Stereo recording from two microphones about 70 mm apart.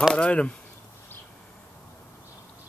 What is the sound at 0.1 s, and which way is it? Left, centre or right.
Speech, centre.